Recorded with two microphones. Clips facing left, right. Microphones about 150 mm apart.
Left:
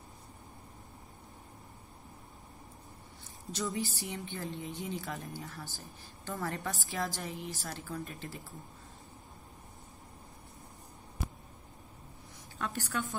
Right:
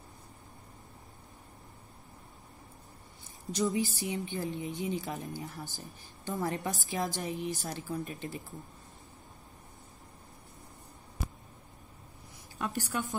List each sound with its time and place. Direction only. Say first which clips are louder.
3.5 s a woman's voice: right 5 dB; 15° right (ahead or behind)
12.5 s a woman's voice: right 2 dB; 15° right (ahead or behind)